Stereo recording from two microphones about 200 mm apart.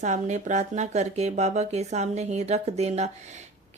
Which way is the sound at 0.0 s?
35° right (ahead or behind).